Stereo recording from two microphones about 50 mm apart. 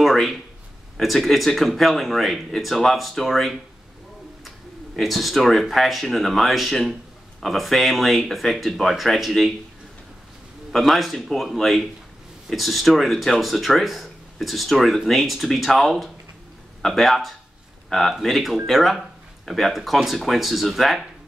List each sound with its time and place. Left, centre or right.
0.0 s a sound: centre
0.9 s speech: centre
10.7 s speech: centre